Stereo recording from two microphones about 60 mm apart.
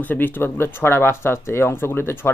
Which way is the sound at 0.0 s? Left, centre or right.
Left.